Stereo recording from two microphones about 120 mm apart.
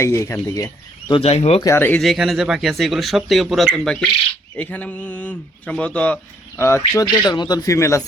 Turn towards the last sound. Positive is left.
turn(degrees=25)  # may be behind; listen again after turning